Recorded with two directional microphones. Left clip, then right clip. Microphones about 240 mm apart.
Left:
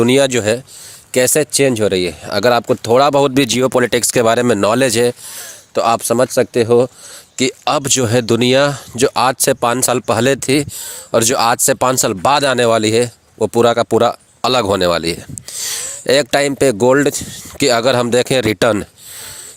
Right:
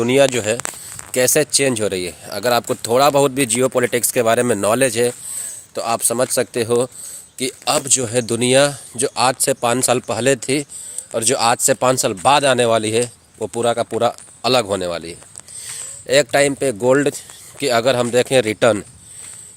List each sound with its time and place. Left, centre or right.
0.0 s speech: left